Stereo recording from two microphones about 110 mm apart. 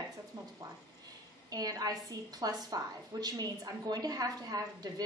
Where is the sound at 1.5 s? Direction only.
35° right (ahead or behind).